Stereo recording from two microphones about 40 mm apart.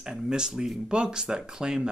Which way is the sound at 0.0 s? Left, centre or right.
Centre.